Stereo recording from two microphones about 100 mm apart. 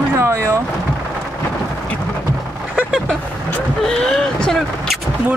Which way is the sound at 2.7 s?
10° right (ahead or behind).